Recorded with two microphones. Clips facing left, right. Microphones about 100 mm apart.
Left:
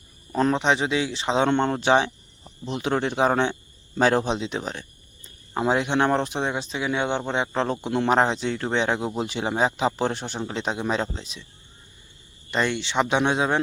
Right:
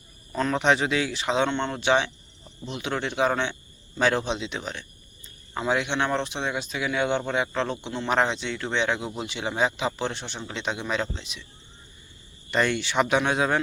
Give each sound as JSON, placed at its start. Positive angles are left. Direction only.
{"t": 0.5, "sound": "speech", "side_deg": 20}
{"t": 1.5, "sound": "speech", "side_deg": 45}
{"t": 12.5, "sound": "speech", "side_deg": 20}